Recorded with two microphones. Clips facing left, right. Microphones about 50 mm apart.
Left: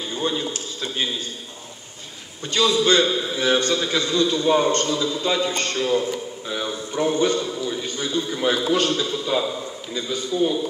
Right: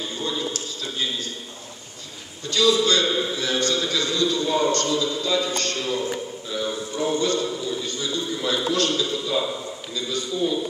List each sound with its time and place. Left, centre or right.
0.1 s a man's voice: left
2.5 s a man's voice: left
6.5 s a sound: left
8.4 s a man's voice: left